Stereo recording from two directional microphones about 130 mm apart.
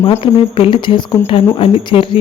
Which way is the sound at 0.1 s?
45° left (ahead or behind).